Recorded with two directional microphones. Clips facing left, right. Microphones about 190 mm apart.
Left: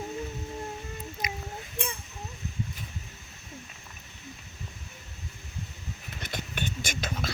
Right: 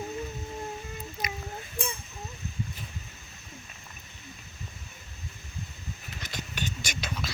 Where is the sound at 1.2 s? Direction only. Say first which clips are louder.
Even; 20° left (ahead or behind).